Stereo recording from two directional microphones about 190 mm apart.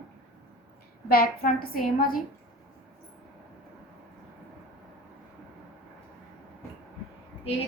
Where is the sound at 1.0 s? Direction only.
50° left (ahead or behind).